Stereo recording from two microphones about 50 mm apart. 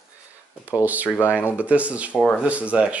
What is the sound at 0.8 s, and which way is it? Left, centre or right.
Speech, right.